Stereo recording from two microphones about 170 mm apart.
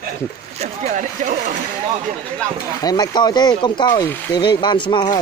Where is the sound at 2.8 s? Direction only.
25° left (ahead or behind).